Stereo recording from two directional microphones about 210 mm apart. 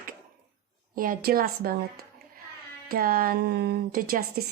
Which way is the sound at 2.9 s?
45° right (ahead or behind).